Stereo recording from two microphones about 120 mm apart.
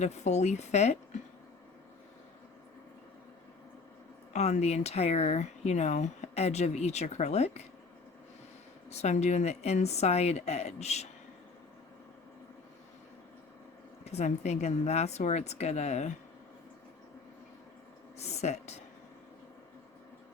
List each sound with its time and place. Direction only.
0.0 s speech: 70° left (ahead or behind)
4.3 s speech: 75° left (ahead or behind)
8.9 s speech: 70° left (ahead or behind)
14.0 s speech: 65° left (ahead or behind)
18.2 s speech: 70° left (ahead or behind)